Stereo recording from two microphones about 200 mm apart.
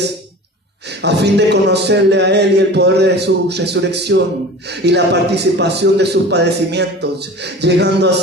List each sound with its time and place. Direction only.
1.0 s a man's voice: 55° right (ahead or behind)